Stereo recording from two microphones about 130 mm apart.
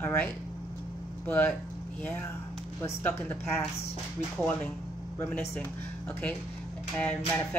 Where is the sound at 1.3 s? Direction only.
15° left (ahead or behind).